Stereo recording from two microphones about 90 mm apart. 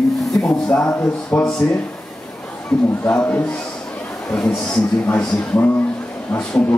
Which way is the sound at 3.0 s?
15° left (ahead or behind).